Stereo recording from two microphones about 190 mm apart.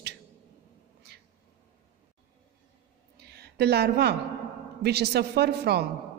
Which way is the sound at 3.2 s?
60° right (ahead or behind).